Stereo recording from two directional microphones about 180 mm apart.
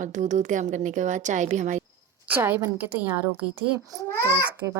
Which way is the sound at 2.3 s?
10° right (ahead or behind).